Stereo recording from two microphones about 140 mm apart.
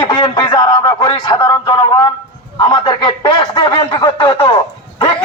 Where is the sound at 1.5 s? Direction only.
30° left (ahead or behind).